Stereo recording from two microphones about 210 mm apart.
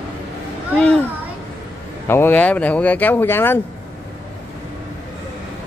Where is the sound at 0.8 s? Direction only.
5° left (ahead or behind).